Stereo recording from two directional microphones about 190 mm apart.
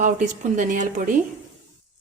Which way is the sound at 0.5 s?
40° right (ahead or behind).